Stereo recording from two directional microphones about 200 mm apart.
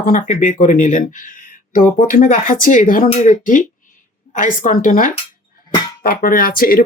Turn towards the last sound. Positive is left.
turn(degrees=45)  # may be behind; listen again after turning